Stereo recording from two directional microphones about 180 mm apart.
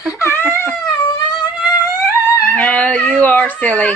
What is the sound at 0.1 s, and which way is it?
Whimper, 15° left (ahead or behind).